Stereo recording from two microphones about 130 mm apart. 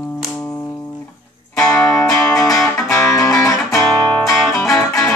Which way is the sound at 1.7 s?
10° left (ahead or behind).